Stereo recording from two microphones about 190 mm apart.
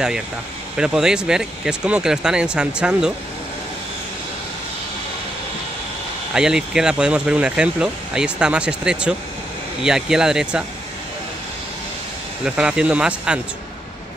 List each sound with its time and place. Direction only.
0.7 s speech: 5° right (ahead or behind)
6.3 s speech: 5° right (ahead or behind)
12.4 s speech: 5° right (ahead or behind)